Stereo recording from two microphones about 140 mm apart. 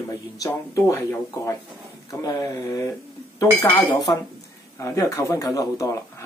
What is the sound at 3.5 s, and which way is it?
Speech, 25° left (ahead or behind).